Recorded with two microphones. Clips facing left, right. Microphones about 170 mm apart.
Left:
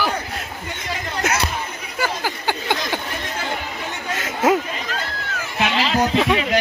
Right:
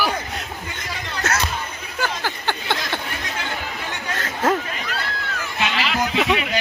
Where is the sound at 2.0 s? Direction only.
10° left (ahead or behind).